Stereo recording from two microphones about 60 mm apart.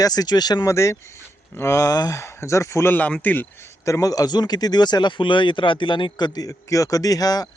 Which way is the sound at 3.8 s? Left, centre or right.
Left.